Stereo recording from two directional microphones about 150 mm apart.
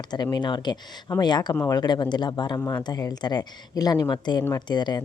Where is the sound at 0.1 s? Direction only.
30° left (ahead or behind).